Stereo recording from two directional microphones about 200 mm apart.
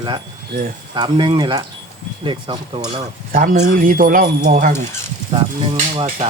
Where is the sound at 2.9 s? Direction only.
45° right (ahead or behind).